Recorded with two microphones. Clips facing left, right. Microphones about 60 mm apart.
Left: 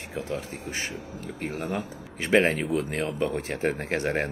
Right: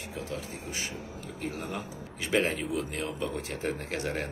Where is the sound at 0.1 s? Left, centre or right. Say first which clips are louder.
Left 6 dB; left.